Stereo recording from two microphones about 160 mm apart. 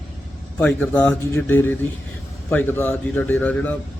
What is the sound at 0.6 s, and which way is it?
A man's voice, 10° left (ahead or behind).